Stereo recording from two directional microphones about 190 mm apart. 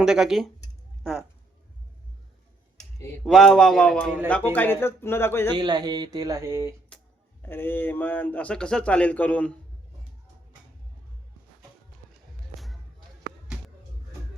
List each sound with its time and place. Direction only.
0.0 s speech: centre (ahead or behind)
3.0 s a man's voice: centre (ahead or behind)
5.5 s speech: 20° right (ahead or behind)
7.4 s a man's voice: 10° left (ahead or behind)